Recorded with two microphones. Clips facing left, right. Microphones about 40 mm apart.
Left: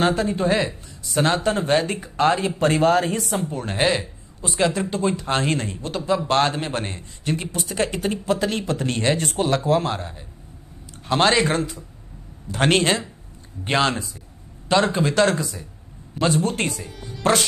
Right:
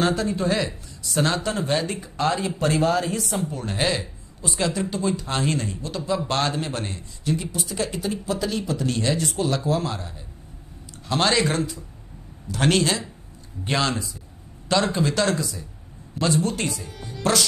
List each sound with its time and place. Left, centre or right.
0.0 s speech: left
3.4 s speech: left
7.2 s speech: left